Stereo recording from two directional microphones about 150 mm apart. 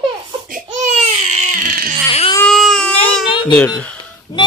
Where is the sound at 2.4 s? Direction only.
Centre (ahead or behind).